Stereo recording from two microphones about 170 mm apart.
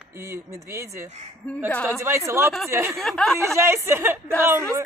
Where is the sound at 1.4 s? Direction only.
10° left (ahead or behind).